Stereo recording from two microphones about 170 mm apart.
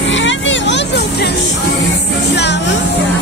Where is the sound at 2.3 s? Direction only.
90° left.